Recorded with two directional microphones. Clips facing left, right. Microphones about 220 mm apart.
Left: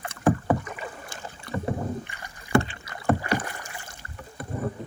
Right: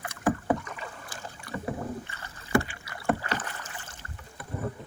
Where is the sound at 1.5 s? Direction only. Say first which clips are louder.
Left 4 dB; 25° left (ahead or behind).